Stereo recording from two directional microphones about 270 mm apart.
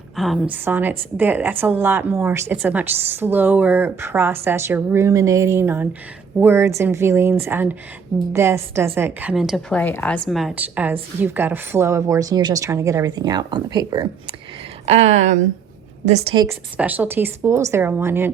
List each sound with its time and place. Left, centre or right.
0.2 s a woman's voice: centre